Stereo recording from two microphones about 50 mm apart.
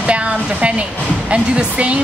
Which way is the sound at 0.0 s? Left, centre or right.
Right.